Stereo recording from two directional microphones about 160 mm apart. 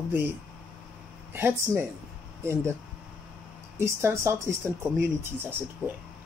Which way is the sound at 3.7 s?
15° right (ahead or behind).